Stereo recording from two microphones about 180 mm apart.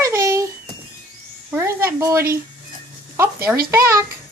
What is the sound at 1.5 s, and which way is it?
Speech, 15° right (ahead or behind).